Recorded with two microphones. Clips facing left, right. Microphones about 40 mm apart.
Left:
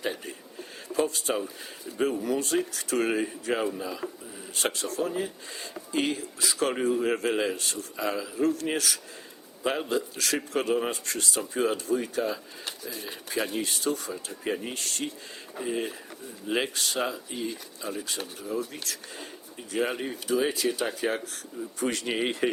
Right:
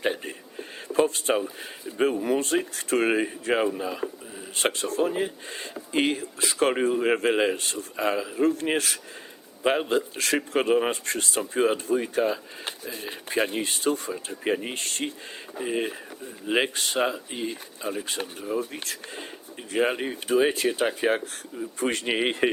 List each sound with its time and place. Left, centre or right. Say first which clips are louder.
0.0 s a sound: right 5 dB; right
0.9 s speech: right 4 dB; right
20.2 s speech: right 4 dB; right